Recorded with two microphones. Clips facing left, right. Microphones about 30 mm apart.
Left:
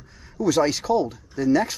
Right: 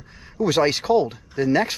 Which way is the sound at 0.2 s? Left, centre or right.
Right.